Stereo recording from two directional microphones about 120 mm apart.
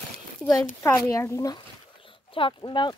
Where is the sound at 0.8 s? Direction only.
25° left (ahead or behind).